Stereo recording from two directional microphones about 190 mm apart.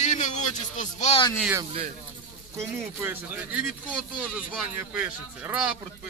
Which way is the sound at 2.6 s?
10° right (ahead or behind).